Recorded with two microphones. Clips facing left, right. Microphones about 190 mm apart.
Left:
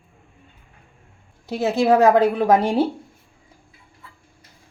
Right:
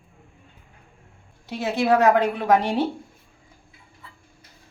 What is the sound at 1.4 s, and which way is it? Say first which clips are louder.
A woman's voice: left 4 dB; 30° left (ahead or behind).